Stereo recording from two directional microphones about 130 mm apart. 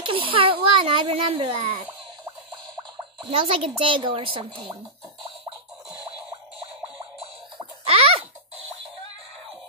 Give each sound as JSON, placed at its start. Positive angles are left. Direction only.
{"t": 0.0, "sound": "a child's voice", "side_deg": -45}
{"t": 3.3, "sound": "speech", "side_deg": -45}
{"t": 7.8, "sound": "a sound", "side_deg": -50}